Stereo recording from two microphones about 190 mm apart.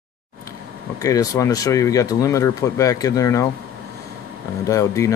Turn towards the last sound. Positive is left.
turn(degrees=15)  # may be behind; listen again after turning